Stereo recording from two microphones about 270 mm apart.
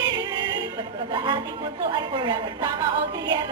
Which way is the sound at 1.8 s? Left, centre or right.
Centre.